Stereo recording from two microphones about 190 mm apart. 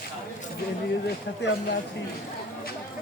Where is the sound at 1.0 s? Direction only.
65° left (ahead or behind).